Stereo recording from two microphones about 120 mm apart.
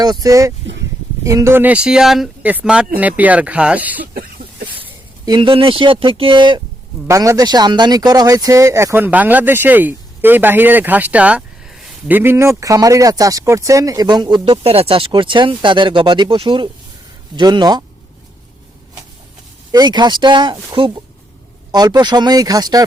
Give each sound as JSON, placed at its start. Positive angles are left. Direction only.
{"t": 0.0, "sound": "speech", "side_deg": -30}
{"t": 5.2, "sound": "speech", "side_deg": -40}
{"t": 7.1, "sound": "speech", "side_deg": -30}
{"t": 12.0, "sound": "speech", "side_deg": -15}
{"t": 19.7, "sound": "speech", "side_deg": -35}
{"t": 21.7, "sound": "speech", "side_deg": -35}